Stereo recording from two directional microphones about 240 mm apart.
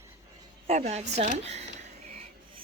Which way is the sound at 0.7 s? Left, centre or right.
Right.